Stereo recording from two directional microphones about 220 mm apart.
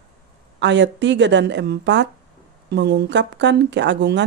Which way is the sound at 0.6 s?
55° right (ahead or behind).